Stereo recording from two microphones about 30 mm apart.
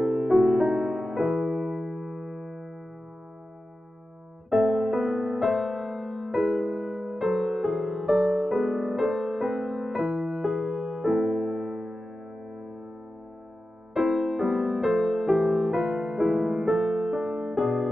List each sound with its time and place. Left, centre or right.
0.0 s music: centre
4.5 s music: centre
6.8 s music: centre
7.2 s music: centre
13.9 s music: centre